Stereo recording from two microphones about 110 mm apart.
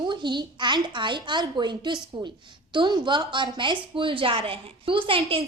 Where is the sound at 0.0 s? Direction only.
45° right (ahead or behind).